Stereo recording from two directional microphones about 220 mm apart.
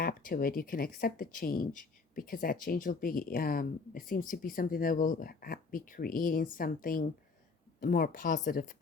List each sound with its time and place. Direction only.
0.0 s speech: 40° left (ahead or behind)